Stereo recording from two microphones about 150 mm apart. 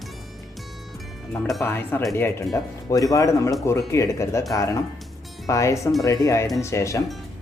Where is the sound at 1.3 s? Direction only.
Centre (ahead or behind).